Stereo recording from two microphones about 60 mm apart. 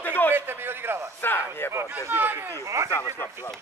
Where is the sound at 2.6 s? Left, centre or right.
Right.